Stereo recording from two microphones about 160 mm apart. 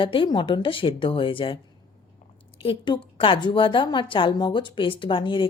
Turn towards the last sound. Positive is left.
turn(degrees=30)  # may be behind; listen again after turning